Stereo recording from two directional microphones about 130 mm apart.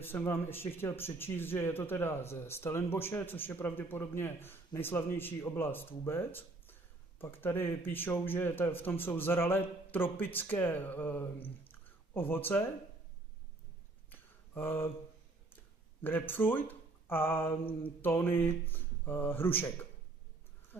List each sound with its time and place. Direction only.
0.0 s speech: 15° left (ahead or behind)
14.1 s a sound: 15° left (ahead or behind)
18.0 s speech: 15° left (ahead or behind)